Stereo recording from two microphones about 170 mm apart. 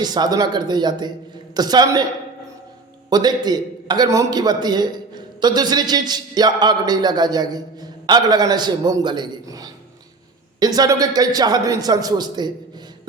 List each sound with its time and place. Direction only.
0.0 s a man's voice: 25° right (ahead or behind)
3.1 s a man's voice: 25° right (ahead or behind)